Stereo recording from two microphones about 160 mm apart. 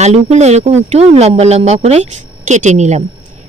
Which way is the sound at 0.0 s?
45° right (ahead or behind).